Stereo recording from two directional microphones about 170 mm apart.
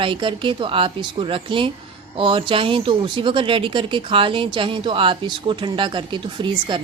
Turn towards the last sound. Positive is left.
turn(degrees=-30)  # may be behind; listen again after turning